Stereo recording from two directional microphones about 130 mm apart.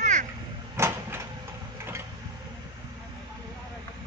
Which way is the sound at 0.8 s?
20° right (ahead or behind).